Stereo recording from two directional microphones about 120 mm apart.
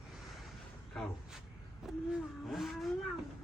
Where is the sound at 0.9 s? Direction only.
5° left (ahead or behind).